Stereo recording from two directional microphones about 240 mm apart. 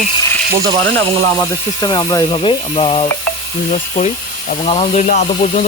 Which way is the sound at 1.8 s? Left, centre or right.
Centre.